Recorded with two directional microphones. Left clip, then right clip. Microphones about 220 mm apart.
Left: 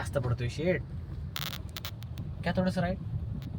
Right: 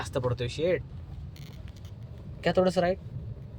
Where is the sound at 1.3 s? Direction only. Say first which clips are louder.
Left 17 dB; 10° left (ahead or behind).